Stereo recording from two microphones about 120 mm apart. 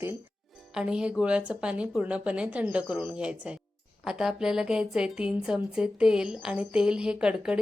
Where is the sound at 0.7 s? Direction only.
5° right (ahead or behind).